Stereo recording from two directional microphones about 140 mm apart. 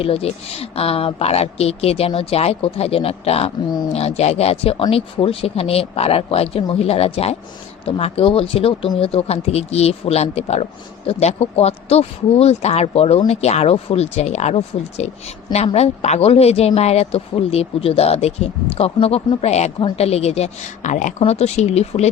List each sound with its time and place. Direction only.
0.0 s speech: 45° left (ahead or behind)